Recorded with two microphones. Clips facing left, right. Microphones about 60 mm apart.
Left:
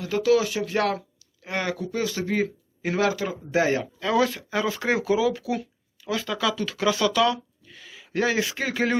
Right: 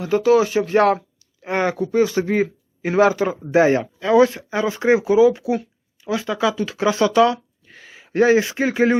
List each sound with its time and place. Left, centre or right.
0.0 s speech: right